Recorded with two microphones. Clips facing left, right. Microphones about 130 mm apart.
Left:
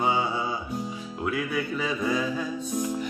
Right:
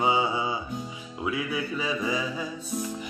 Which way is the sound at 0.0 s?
10° right (ahead or behind).